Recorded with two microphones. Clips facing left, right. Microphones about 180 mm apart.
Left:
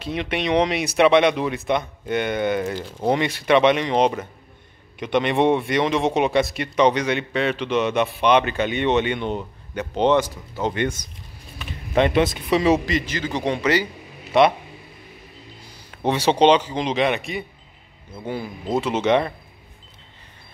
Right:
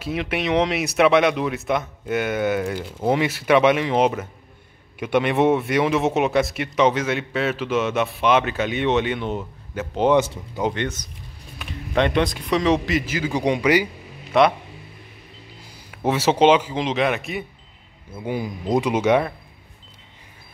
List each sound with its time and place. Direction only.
0.0 s speech: 5° right (ahead or behind)
10.1 s speech: 20° right (ahead or behind)
10.7 s speech: 10° left (ahead or behind)
12.9 s speech: 5° right (ahead or behind)
14.3 s speech: centre (ahead or behind)
15.9 s speech: 5° right (ahead or behind)
18.1 s speech: 15° right (ahead or behind)